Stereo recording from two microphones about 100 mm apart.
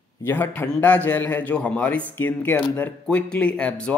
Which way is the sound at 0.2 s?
20° left (ahead or behind).